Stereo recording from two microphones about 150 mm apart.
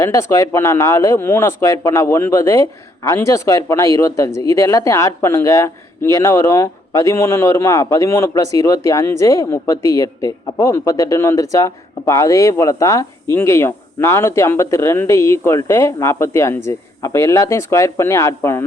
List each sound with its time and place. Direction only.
0.0 s speech: 20° left (ahead or behind)